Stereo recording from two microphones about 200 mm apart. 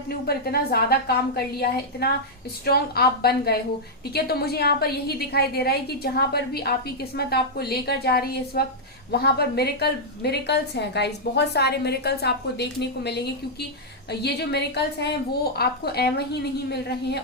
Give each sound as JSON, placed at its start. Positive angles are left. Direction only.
{"t": 0.3, "sound": "a woman's voice", "side_deg": 50}